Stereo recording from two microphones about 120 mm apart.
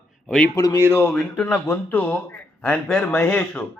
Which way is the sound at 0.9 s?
10° left (ahead or behind).